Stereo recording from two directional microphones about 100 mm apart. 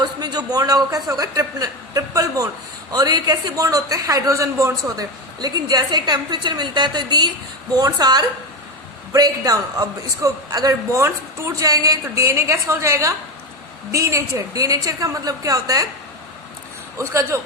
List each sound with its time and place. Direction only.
0.0 s a woman's voice: 45° right (ahead or behind)
17.0 s a man's voice: 30° right (ahead or behind)